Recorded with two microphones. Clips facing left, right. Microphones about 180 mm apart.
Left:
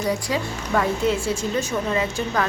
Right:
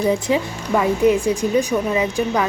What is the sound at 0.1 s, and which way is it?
A woman's voice, 20° right (ahead or behind).